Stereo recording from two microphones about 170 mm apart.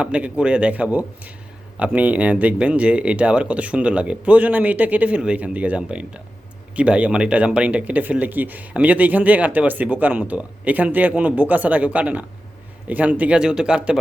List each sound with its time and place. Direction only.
0.0 s speech: 5° right (ahead or behind)